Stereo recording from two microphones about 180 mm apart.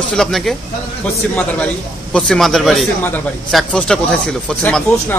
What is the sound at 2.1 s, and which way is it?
Speech, 5° left (ahead or behind).